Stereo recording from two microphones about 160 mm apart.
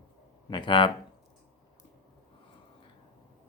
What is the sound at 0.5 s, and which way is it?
Speech, 30° left (ahead or behind).